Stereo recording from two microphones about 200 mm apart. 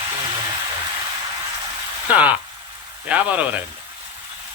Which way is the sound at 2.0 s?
5° right (ahead or behind).